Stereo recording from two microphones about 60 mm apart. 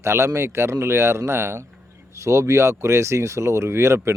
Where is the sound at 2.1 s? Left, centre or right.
Right.